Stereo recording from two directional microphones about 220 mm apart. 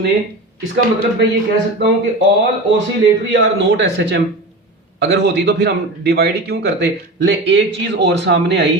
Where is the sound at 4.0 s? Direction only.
55° right (ahead or behind).